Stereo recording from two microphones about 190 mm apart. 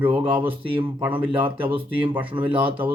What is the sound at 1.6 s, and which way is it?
Speech, 25° right (ahead or behind).